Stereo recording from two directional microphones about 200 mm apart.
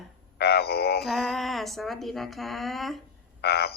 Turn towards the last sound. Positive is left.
turn(degrees=55)  # may be behind; listen again after turning